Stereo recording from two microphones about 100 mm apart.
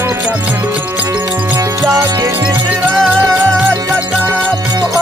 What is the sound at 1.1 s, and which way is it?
Music, 40° right (ahead or behind).